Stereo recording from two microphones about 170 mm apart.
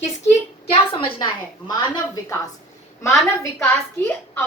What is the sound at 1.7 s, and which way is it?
A woman's voice, 20° left (ahead or behind).